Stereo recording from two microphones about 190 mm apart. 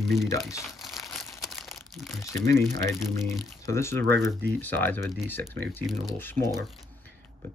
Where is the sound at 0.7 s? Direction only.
Centre (ahead or behind).